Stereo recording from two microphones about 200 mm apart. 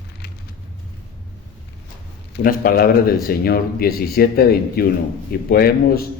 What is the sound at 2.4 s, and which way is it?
Speech, 45° left (ahead or behind).